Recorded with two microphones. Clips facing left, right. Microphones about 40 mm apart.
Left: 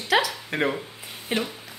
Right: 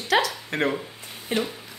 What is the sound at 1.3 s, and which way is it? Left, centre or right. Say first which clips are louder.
Speech: right 1 dB; centre.